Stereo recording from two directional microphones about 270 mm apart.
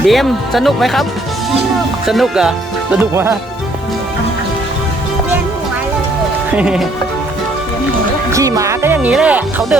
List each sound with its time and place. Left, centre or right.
0.0 s speech: centre
2.0 s speech: centre
6.5 s speech: centre
8.3 s speech: centre